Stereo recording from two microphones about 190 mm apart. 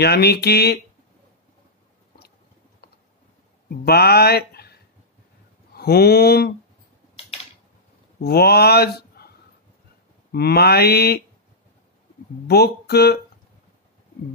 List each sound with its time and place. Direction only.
0.0 s mantra: 60° left (ahead or behind)
3.6 s speech: 55° left (ahead or behind)
5.8 s mantra: 55° left (ahead or behind)
8.2 s speech: 55° left (ahead or behind)
10.3 s mantra: 55° left (ahead or behind)
12.4 s mantra: 60° left (ahead or behind)